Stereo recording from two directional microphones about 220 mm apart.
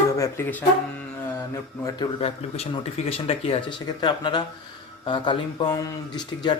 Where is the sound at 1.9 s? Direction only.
25° left (ahead or behind).